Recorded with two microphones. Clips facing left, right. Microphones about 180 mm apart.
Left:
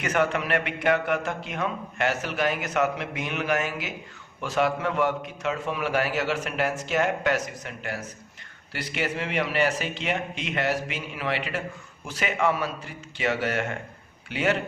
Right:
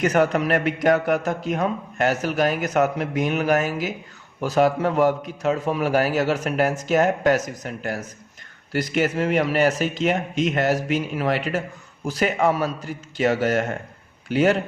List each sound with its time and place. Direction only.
0.0 s a man's voice: 40° right (ahead or behind)